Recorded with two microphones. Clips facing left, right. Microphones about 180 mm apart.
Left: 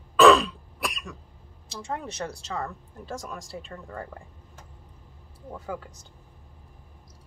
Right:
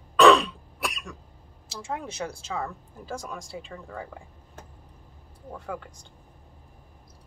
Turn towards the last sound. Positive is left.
turn(degrees=5)  # may be behind; listen again after turning